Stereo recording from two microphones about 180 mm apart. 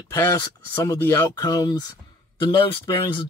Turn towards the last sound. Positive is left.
turn(degrees=25)  # may be behind; listen again after turning